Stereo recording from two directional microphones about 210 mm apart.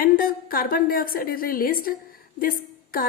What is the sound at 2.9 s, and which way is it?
Speech, 40° left (ahead or behind).